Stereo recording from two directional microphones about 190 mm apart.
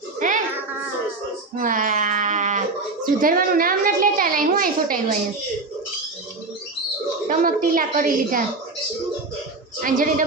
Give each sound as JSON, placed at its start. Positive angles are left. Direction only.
{"t": 0.2, "sound": "a sound", "side_deg": -45}
{"t": 1.5, "sound": "speech", "side_deg": -45}
{"t": 7.3, "sound": "a woman's voice", "side_deg": -45}
{"t": 9.8, "sound": "a woman's voice", "side_deg": -45}